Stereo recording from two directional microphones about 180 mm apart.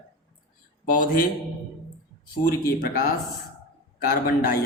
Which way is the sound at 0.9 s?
50° left (ahead or behind).